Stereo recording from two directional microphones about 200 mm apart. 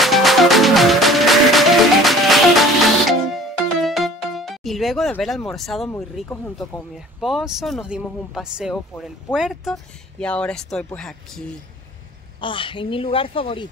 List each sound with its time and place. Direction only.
0.0 s music: centre (ahead or behind)
6.2 s speech: 10° left (ahead or behind)
7.2 s speech: centre (ahead or behind)
12.4 s speech: 25° left (ahead or behind)